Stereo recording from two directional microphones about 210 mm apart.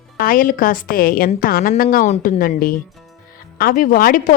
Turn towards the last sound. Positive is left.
turn(degrees=40)  # may be behind; listen again after turning